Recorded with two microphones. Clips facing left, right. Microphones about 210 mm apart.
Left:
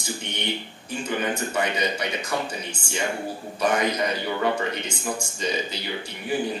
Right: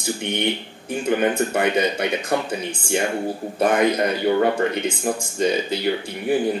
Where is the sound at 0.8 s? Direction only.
55° right (ahead or behind).